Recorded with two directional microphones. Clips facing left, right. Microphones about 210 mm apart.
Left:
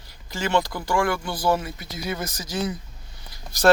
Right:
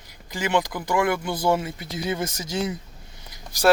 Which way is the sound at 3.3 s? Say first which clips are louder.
Left 1 dB; 10° right (ahead or behind).